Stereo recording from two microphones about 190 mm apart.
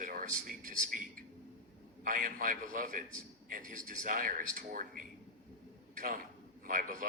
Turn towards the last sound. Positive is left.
turn(degrees=-45)  # may be behind; listen again after turning